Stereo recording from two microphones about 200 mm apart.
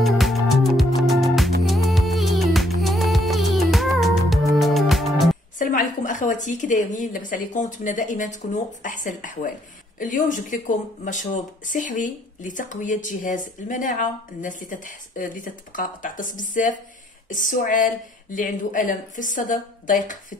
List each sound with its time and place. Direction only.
0.0 s music: centre (ahead or behind)
5.6 s a woman's voice: 40° left (ahead or behind)